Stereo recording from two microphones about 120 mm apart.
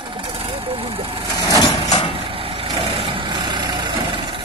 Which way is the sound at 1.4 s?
30° left (ahead or behind).